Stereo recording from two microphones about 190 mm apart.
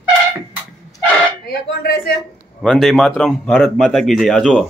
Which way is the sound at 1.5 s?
55° left (ahead or behind).